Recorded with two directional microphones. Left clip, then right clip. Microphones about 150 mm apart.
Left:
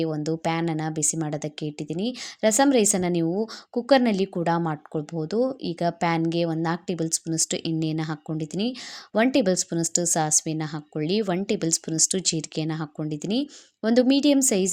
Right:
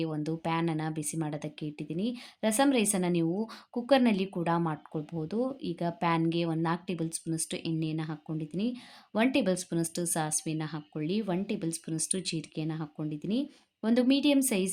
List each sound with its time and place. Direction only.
0.0 s speech: 30° left (ahead or behind)